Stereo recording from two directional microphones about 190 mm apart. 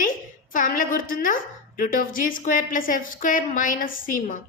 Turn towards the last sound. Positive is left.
turn(degrees=45)  # may be behind; listen again after turning